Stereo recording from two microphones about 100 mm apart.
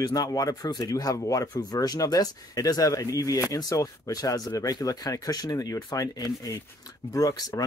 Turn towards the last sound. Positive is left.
turn(degrees=40)  # may be behind; listen again after turning